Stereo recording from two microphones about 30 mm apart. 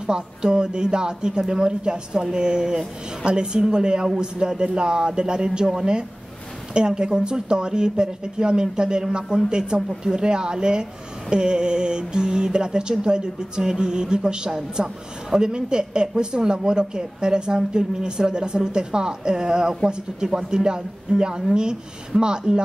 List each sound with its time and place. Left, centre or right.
0.0 s a woman's voice: right
7.0 s a woman's voice: right
15.2 s speech: centre
15.5 s a woman's voice: right